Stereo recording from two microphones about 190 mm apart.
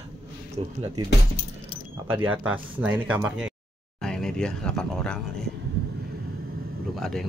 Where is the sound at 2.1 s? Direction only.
10° right (ahead or behind).